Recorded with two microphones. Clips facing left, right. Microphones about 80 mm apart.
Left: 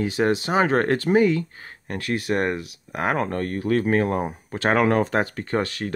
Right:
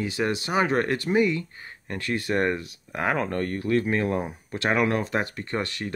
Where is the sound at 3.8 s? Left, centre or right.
Left.